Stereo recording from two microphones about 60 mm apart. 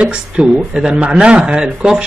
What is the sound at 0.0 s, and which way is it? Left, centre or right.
Speech, centre.